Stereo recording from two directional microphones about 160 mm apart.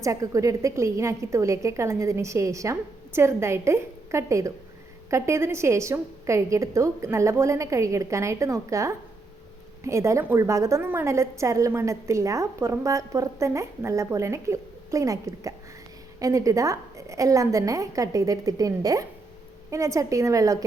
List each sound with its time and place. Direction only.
0.0 s a woman's voice: 20° right (ahead or behind)